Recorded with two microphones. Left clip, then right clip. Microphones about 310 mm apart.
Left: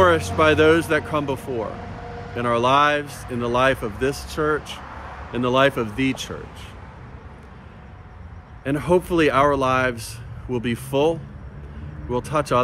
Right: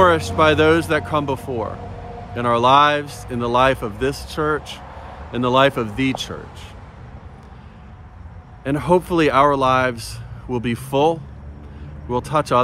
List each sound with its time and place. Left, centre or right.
0.0 s speech: centre
8.6 s speech: centre